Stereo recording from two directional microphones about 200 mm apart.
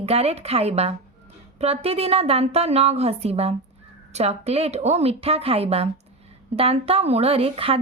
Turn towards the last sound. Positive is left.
turn(degrees=-30)  # may be behind; listen again after turning